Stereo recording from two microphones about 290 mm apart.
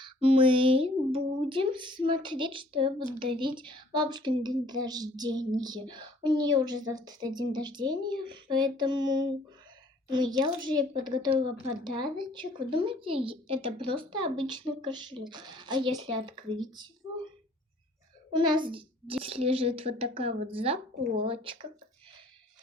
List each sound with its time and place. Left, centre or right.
0.0 s speech: centre
18.3 s a child's voice: centre